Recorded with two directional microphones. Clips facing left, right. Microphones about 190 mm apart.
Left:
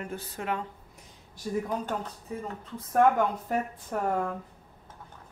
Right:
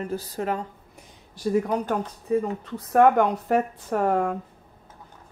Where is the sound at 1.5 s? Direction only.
75° right (ahead or behind).